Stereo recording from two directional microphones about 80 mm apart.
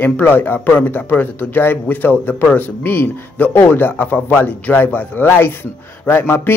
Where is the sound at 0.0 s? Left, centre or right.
Left.